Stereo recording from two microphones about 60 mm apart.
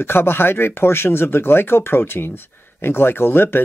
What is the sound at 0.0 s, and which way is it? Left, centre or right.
Speech, left.